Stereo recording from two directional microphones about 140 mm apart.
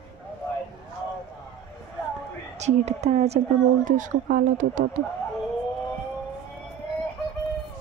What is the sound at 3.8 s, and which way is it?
Speech, 65° right (ahead or behind).